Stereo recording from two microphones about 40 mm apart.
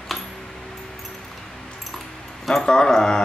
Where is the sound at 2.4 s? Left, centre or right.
Centre.